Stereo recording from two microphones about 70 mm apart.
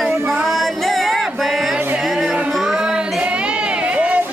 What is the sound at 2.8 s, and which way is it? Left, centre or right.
Child singing, centre.